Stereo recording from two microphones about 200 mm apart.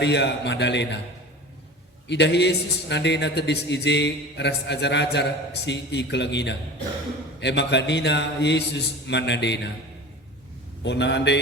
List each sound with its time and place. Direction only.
0.0 s a man's voice: 60° left (ahead or behind)
2.0 s a man's voice: 60° left (ahead or behind)
10.8 s a man's voice: 60° left (ahead or behind)